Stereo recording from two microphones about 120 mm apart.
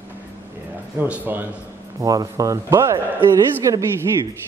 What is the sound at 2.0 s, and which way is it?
A man's voice, 30° right (ahead or behind).